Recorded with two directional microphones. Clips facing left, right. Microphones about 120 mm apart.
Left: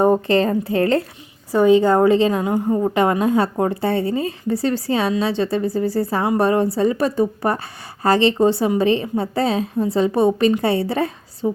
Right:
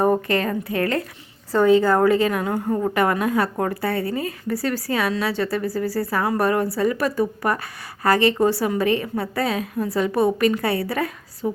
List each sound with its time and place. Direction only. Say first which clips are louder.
0.0 s a woman's voice: left 4 dB; 25° left (ahead or behind)
1.5 s a woman's voice: left 2 dB; 20° left (ahead or behind)